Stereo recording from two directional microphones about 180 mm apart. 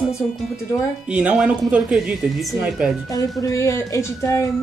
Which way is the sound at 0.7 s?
5° right (ahead or behind).